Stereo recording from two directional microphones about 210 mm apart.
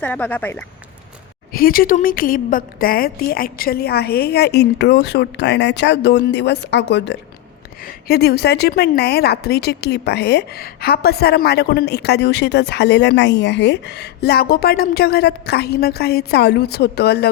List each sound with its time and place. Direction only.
0.0 s speech: 5° left (ahead or behind)
1.5 s speech: 45° left (ahead or behind)